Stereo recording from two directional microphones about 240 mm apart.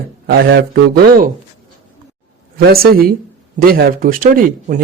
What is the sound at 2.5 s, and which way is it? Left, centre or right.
Speech, right.